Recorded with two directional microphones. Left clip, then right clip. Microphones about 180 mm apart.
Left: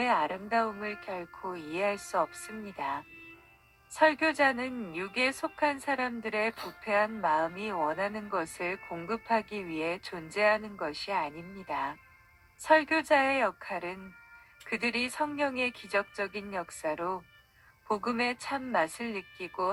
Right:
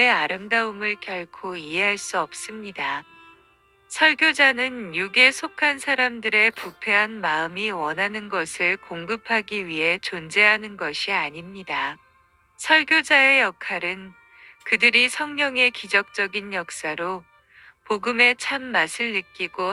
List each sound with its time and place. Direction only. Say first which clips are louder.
0.0 s speech: right 9 dB; 60° right (ahead or behind)